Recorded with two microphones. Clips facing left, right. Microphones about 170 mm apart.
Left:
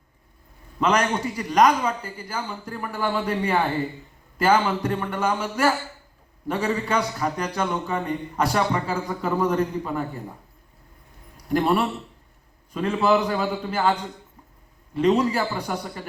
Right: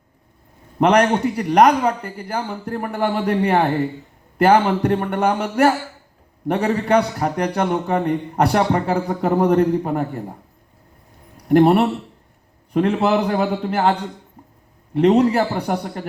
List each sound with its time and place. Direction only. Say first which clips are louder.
0.8 s a man's voice: right 7 dB; 65° right (ahead or behind)
11.4 s a man's voice: right 8 dB; 60° right (ahead or behind)